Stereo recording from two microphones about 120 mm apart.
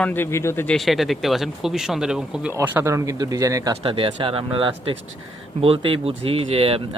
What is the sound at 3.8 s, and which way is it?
Speech, 50° right (ahead or behind).